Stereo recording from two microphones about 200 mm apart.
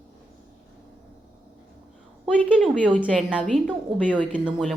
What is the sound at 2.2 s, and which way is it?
A woman's voice, centre (ahead or behind).